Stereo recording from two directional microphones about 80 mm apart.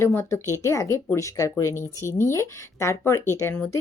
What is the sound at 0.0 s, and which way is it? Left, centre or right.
A woman's voice, left.